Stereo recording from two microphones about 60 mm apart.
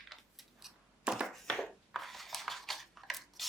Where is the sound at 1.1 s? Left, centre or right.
Centre.